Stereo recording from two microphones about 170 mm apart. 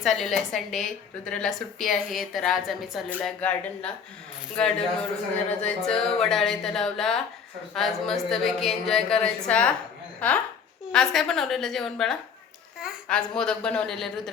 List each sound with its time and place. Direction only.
0.0 s a woman's voice: centre (ahead or behind)